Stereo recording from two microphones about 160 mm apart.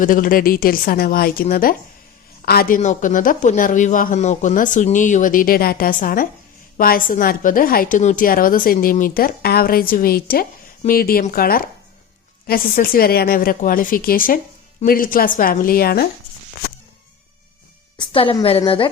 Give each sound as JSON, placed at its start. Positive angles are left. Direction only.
{"t": 0.0, "sound": "speech", "side_deg": 60}
{"t": 17.9, "sound": "a woman's voice", "side_deg": 30}